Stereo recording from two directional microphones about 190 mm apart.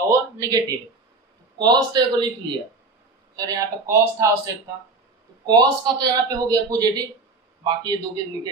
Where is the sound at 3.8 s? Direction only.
15° right (ahead or behind).